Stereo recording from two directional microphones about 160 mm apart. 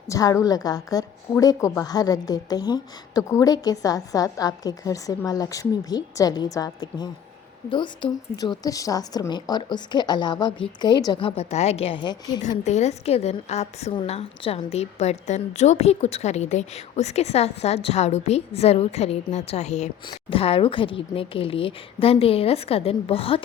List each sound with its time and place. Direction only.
0.1 s a woman's voice: 20° left (ahead or behind)
12.6 s a woman's voice: 45° left (ahead or behind)